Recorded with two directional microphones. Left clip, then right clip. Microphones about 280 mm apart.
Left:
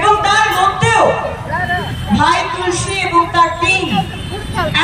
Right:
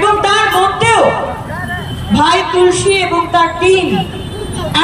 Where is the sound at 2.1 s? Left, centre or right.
Right.